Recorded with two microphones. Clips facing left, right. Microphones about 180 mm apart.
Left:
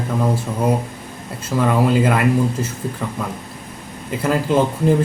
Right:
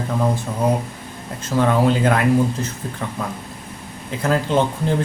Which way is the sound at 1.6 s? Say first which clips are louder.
Left 1 dB; 5° left (ahead or behind).